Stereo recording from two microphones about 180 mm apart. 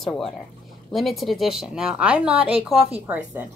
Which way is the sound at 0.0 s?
Centre (ahead or behind).